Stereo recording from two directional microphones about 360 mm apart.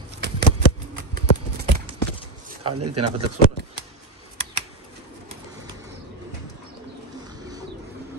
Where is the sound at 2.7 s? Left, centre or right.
Right.